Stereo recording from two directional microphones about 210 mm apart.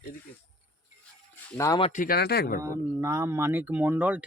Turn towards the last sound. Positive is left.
turn(degrees=-10)  # may be behind; listen again after turning